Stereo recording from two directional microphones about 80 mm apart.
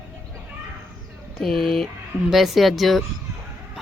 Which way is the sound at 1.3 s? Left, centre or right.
Centre.